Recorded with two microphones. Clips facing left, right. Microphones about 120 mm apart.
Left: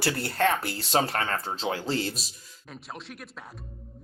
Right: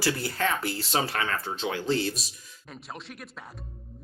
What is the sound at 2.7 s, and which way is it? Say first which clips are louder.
Speech: even; centre (ahead or behind).